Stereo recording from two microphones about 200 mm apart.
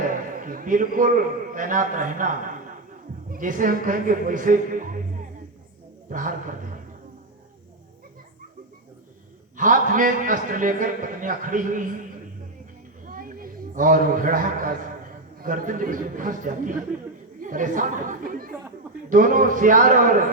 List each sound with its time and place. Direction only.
0.1 s a man's voice: 45° right (ahead or behind)
6.1 s a man's voice: 40° right (ahead or behind)
9.6 s a man's voice: 40° right (ahead or behind)
13.1 s a sound: 45° right (ahead or behind)
15.4 s a man's voice: 45° right (ahead or behind)